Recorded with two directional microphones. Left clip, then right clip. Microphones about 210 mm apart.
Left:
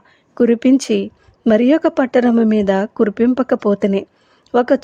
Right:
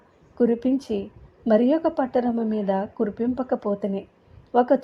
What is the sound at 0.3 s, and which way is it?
Speech, 30° left (ahead or behind).